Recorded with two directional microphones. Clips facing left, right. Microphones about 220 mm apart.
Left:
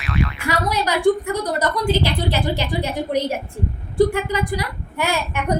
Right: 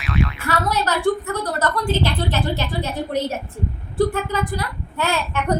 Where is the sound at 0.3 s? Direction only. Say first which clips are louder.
Even; 15° left (ahead or behind).